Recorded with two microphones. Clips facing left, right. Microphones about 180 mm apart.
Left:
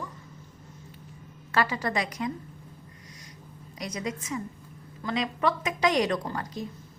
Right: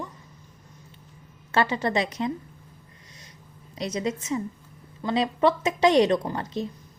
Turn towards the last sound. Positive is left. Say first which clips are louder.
# right 5 dB
turn(degrees=-25)  # may be behind; listen again after turning